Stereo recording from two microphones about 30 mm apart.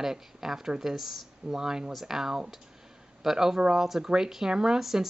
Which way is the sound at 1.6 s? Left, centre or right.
Right.